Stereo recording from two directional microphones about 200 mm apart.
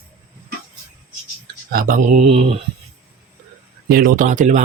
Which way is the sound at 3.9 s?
45° right (ahead or behind).